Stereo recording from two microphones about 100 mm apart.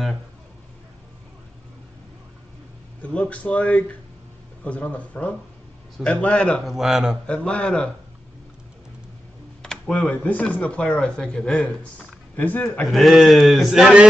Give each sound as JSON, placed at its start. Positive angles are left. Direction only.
{"t": 3.0, "sound": "speech", "side_deg": 10}
{"t": 6.6, "sound": "speech", "side_deg": -5}
{"t": 7.2, "sound": "speech", "side_deg": 10}
{"t": 9.6, "sound": "speech", "side_deg": 10}
{"t": 12.8, "sound": "speech", "side_deg": 0}